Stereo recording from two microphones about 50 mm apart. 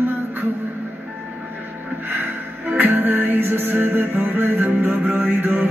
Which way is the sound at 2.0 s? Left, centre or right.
Right.